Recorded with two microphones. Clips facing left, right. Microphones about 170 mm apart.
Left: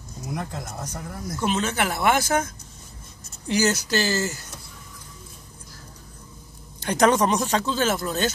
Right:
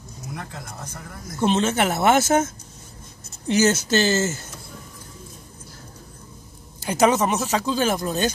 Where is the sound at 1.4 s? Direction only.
25° right (ahead or behind).